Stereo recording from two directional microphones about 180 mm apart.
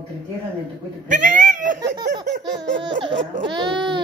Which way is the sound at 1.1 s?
45° right (ahead or behind).